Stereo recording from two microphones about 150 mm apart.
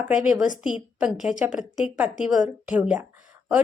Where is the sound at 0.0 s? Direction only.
5° right (ahead or behind).